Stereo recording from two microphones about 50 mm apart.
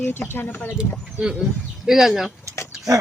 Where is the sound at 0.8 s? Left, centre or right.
Centre.